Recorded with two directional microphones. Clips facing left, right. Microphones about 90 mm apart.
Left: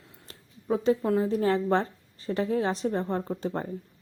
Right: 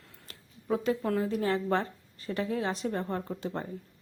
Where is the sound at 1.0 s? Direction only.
20° left (ahead or behind).